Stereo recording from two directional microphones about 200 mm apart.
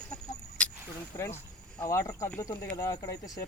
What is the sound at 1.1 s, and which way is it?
Speech, 10° left (ahead or behind).